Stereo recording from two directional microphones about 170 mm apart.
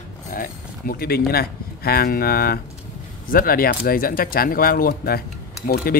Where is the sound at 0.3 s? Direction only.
55° left (ahead or behind).